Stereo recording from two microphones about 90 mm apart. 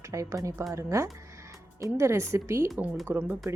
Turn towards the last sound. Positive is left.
turn(degrees=-25)  # may be behind; listen again after turning